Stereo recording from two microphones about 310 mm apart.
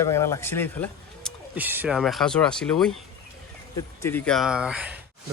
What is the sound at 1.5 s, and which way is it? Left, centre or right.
Speech, centre.